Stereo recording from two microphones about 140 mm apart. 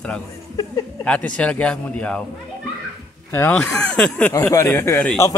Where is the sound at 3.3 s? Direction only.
15° left (ahead or behind).